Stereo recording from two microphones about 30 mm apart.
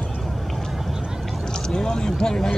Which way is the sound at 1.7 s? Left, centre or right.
Left.